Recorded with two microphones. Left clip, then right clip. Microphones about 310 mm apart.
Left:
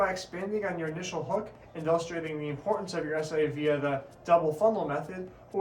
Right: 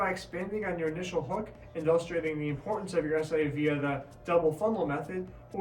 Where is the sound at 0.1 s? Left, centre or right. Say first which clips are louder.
Left 2 dB; centre.